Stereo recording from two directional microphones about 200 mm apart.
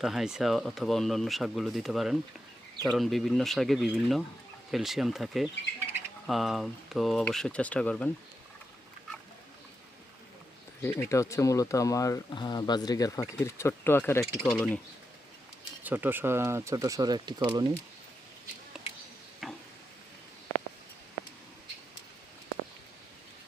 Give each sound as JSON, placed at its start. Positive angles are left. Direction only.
{"t": 0.0, "sound": "speech", "side_deg": 0}
{"t": 10.8, "sound": "speech", "side_deg": 15}
{"t": 14.3, "sound": "speech", "side_deg": 5}
{"t": 15.8, "sound": "speech", "side_deg": -10}
{"t": 19.4, "sound": "a sound", "side_deg": 0}